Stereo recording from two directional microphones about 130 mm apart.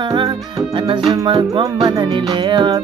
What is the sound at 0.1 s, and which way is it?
Music, 40° right (ahead or behind).